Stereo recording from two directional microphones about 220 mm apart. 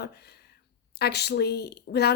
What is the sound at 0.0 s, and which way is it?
A woman's voice, 45° left (ahead or behind).